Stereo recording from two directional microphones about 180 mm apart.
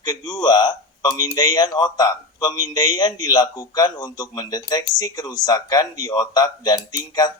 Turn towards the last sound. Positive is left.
turn(degrees=20)  # may be behind; listen again after turning